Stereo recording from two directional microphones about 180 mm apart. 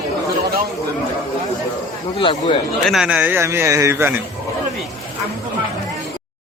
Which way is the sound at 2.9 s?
5° right (ahead or behind).